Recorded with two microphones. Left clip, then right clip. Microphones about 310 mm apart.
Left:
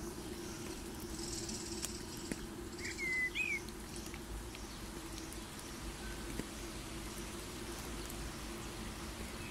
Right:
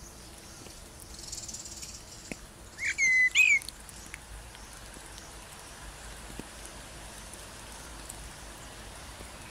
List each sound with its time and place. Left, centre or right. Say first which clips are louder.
2.8 s bird: right 13 dB; right